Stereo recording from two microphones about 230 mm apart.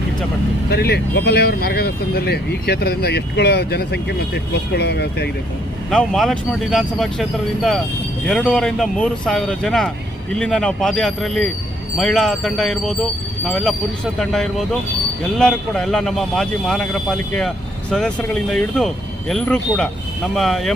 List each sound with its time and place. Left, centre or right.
0.7 s speech: left
5.9 s speech: centre